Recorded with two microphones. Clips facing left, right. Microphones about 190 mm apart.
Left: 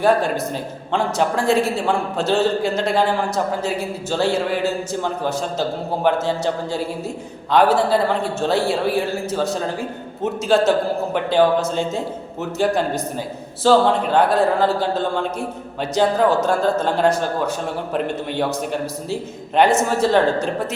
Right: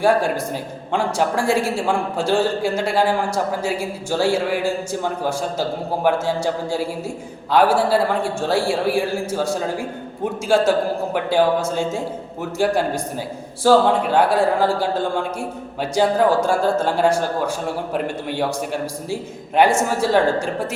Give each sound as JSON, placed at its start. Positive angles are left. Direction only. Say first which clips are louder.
{"t": 0.0, "sound": "a man's voice", "louder": "even", "side_deg": -10}